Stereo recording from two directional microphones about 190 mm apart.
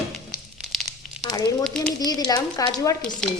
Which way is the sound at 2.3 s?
20° left (ahead or behind).